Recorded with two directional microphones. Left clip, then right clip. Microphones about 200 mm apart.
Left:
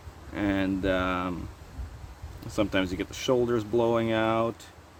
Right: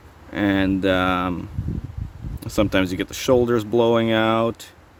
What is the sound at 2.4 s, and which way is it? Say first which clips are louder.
Speech: right 7 dB; 55° right (ahead or behind).